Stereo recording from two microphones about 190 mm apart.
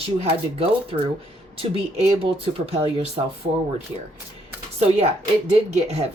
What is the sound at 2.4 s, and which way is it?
Speech, 30° right (ahead or behind).